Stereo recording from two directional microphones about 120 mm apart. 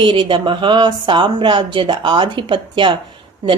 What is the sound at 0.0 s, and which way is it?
Speech, 45° right (ahead or behind).